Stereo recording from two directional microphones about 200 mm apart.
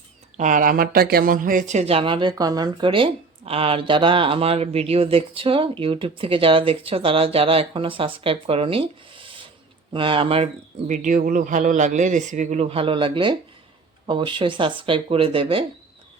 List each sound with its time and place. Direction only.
0.3 s speech: 40° right (ahead or behind)